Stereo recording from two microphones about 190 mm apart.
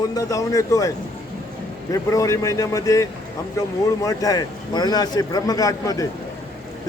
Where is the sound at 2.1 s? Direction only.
15° left (ahead or behind).